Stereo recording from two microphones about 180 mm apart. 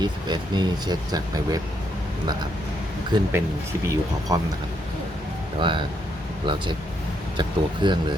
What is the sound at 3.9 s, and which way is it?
Speech, 20° right (ahead or behind).